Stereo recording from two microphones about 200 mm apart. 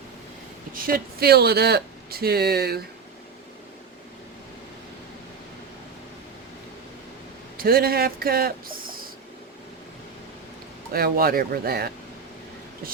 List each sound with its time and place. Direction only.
0.7 s speech: 45° right (ahead or behind)
7.5 s speech: 45° right (ahead or behind)
10.9 s speech: 50° right (ahead or behind)